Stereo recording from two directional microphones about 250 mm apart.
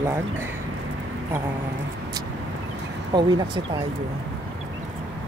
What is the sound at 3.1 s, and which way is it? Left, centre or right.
Speech, centre.